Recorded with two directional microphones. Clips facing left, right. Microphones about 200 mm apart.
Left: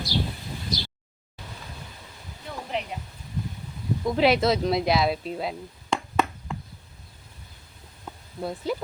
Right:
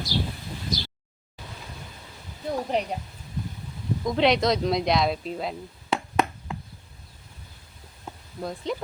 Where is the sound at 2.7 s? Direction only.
40° right (ahead or behind).